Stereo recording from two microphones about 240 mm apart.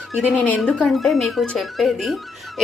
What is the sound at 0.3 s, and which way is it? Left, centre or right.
A woman's voice, centre.